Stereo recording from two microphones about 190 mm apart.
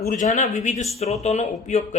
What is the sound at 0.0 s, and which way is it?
A man's voice, 45° left (ahead or behind).